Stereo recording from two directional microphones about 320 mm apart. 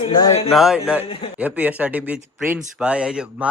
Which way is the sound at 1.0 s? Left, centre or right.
Centre.